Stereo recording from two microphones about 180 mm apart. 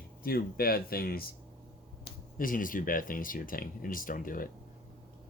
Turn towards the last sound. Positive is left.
turn(degrees=50)  # may be behind; listen again after turning